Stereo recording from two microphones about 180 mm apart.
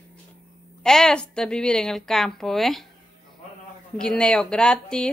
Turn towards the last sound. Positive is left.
turn(degrees=5)  # may be behind; listen again after turning